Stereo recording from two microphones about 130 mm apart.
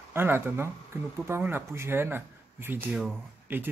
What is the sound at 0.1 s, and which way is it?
Speech, 15° right (ahead or behind).